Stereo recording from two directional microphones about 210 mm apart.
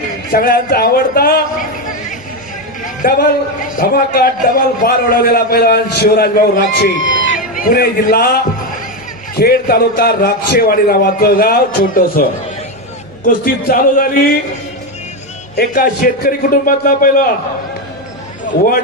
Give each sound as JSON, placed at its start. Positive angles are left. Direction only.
{"t": 0.3, "sound": "a man's voice", "side_deg": 45}
{"t": 7.0, "sound": "a man's voice", "side_deg": 65}
{"t": 7.3, "sound": "a man's voice", "side_deg": 40}
{"t": 9.4, "sound": "a man's voice", "side_deg": 45}
{"t": 15.5, "sound": "a man's voice", "side_deg": 45}